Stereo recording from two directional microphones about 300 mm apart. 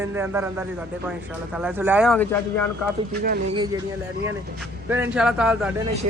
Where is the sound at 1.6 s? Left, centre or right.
Centre.